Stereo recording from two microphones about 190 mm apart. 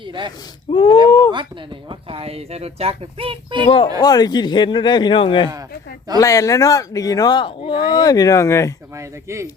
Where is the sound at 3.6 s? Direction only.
30° left (ahead or behind).